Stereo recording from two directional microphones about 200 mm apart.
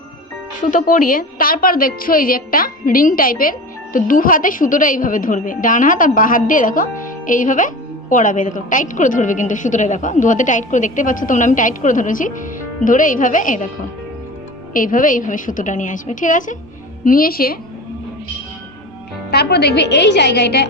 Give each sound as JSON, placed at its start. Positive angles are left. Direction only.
{"t": 0.6, "sound": "a woman's voice", "side_deg": 40}
{"t": 14.7, "sound": "a woman's voice", "side_deg": 45}
{"t": 19.3, "sound": "a woman's voice", "side_deg": 55}